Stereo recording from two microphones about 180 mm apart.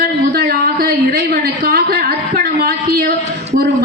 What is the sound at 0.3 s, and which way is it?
A woman's voice, 55° right (ahead or behind).